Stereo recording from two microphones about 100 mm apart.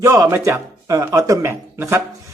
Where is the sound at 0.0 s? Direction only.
30° right (ahead or behind).